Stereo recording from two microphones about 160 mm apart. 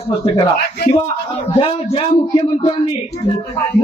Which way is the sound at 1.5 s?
35° left (ahead or behind).